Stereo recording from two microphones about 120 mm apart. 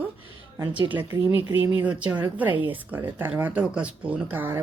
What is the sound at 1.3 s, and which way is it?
Speech, 20° right (ahead or behind).